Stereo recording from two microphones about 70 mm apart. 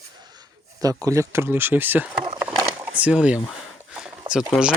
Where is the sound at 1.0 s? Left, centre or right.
Right.